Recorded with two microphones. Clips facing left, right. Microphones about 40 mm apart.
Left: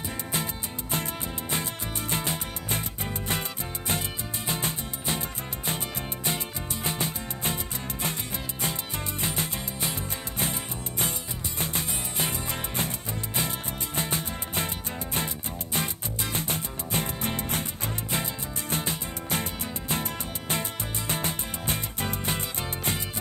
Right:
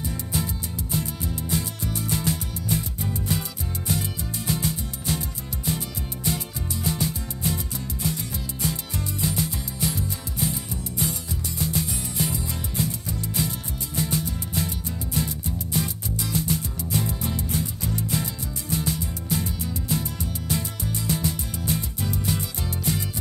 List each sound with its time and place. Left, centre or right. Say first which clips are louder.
0.9 s music: right 2 dB; left
6.2 s music: right 4 dB; left